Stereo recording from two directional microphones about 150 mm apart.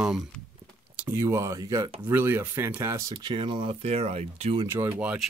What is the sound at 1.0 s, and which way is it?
Speech, 20° right (ahead or behind).